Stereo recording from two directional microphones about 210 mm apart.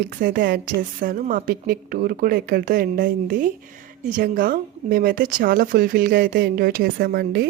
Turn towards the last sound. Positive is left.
turn(degrees=-50)  # may be behind; listen again after turning